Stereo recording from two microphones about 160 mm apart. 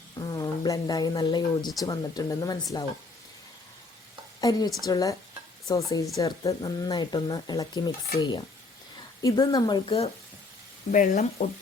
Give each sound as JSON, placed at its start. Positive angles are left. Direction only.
{"t": 0.2, "sound": "speech", "side_deg": 20}
{"t": 4.4, "sound": "speech", "side_deg": 25}
{"t": 10.9, "sound": "speech", "side_deg": 55}